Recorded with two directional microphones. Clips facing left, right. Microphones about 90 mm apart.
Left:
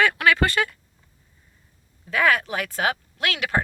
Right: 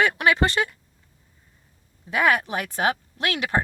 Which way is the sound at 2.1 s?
20° right (ahead or behind).